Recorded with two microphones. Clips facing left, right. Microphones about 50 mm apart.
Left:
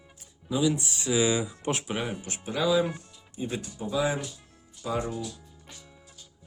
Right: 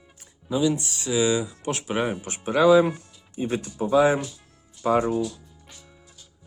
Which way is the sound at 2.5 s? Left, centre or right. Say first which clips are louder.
Right 9 dB; right.